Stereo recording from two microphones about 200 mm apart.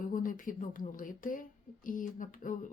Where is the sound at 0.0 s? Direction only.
45° left (ahead or behind).